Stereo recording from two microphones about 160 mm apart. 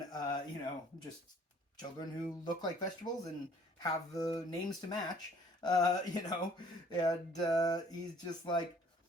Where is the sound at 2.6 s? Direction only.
25° left (ahead or behind).